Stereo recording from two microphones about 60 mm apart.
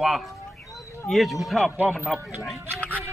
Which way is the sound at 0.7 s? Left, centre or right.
Left.